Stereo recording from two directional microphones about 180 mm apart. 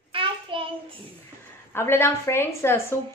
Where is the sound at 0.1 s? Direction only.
30° right (ahead or behind).